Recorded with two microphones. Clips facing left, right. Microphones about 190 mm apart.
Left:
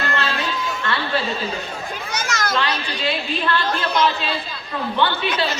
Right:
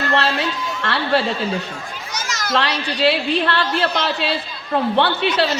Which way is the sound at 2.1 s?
55° left (ahead or behind).